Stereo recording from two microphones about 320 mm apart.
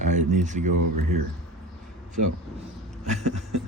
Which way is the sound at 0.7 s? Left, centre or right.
Right.